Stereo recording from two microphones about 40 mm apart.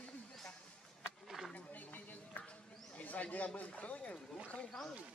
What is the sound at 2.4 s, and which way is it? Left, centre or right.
Mouse, left.